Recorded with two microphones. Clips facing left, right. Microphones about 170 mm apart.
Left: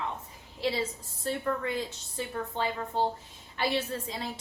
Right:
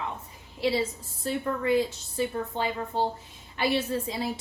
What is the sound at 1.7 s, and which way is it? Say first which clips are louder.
A woman's voice: right 9 dB; 10° right (ahead or behind).